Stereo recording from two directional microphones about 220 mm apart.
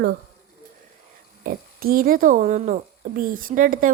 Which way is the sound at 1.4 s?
40° right (ahead or behind).